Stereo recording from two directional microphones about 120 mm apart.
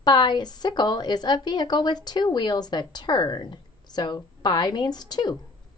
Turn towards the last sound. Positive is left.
turn(degrees=35)  # may be behind; listen again after turning